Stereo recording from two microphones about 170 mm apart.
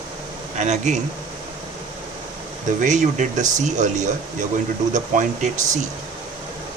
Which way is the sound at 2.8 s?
45° right (ahead or behind).